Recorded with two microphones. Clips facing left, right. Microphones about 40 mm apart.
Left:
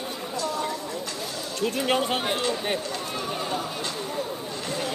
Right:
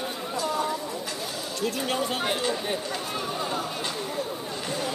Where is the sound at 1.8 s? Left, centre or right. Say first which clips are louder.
Left 6 dB; left.